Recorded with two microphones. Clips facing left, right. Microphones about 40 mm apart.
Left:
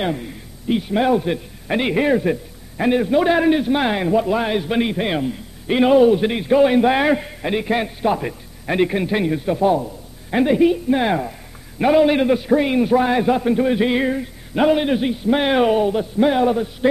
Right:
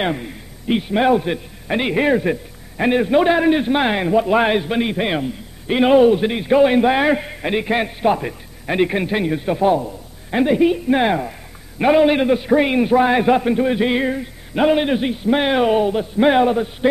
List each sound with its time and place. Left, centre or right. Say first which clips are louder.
0.0 s a man's voice: right 1 dB; right
4.3 s a man's voice: right 4 dB; right
4.6 s a man's voice: even; centre
7.2 s a man's voice: right 1 dB; centre
10.3 s a man's voice: even; centre
10.7 s a man's voice: right 1 dB; right
11.1 s a man's voice: right 1 dB; centre
13.6 s a man's voice: even; centre
16.2 s a man's voice: right 3 dB; right